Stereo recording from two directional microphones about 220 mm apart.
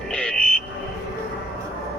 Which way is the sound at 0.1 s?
5° left (ahead or behind).